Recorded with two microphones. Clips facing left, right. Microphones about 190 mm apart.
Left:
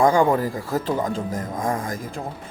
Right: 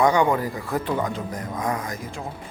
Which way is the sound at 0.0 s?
50° left (ahead or behind).